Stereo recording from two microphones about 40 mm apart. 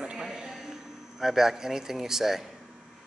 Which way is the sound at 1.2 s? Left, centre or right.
Centre.